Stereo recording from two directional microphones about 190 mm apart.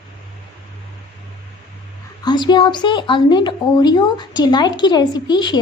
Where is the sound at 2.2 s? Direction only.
20° left (ahead or behind).